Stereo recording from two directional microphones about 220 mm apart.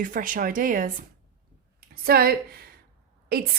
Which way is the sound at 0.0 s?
40° right (ahead or behind).